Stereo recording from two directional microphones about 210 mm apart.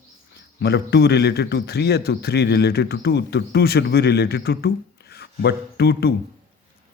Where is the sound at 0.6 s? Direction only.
50° left (ahead or behind).